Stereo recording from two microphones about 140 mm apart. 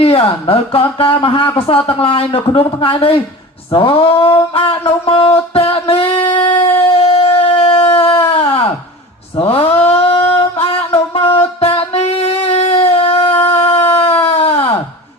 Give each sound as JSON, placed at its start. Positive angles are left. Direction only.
{"t": 0.0, "sound": "speech", "side_deg": 40}
{"t": 6.5, "sound": "a sound", "side_deg": 45}
{"t": 10.3, "sound": "music", "side_deg": 40}